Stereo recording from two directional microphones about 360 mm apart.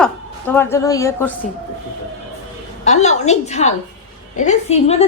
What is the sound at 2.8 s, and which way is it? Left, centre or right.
A woman's voice, centre.